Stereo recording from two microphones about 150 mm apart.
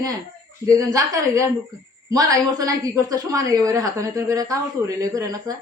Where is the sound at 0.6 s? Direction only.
20° right (ahead or behind).